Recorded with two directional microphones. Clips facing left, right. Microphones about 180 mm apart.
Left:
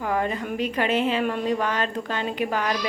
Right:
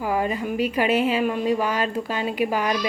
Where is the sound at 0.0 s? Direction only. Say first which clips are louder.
Right 2 dB; 10° right (ahead or behind).